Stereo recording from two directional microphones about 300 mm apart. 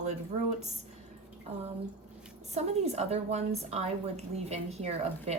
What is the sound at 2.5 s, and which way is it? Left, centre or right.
Speech, right.